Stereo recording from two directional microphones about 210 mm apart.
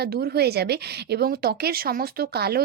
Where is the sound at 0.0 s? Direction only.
50° right (ahead or behind).